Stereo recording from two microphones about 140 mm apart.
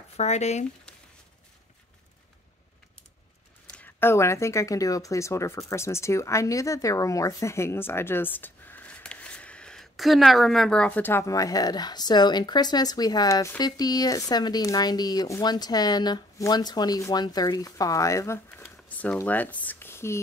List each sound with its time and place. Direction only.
0.2 s speech: 55° left (ahead or behind)
3.7 s speech: 15° left (ahead or behind)
18.6 s a sound: 10° left (ahead or behind)